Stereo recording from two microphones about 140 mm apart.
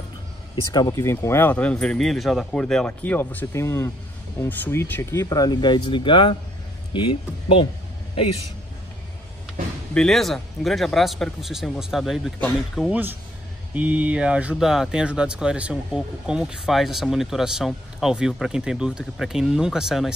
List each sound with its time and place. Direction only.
0.7 s speech: 25° left (ahead or behind)
9.9 s speech: 5° left (ahead or behind)
12.9 s speech: 15° right (ahead or behind)